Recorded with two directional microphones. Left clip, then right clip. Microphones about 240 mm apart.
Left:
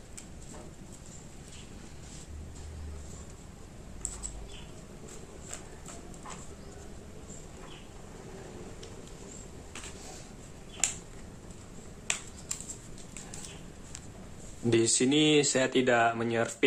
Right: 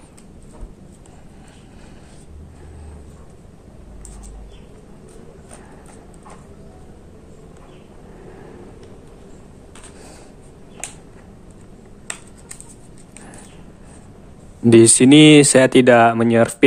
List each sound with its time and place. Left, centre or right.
14.7 s speech: right